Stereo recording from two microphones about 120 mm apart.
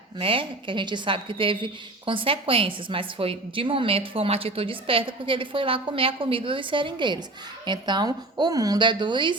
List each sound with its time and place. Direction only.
0.2 s a woman's voice: 45° right (ahead or behind)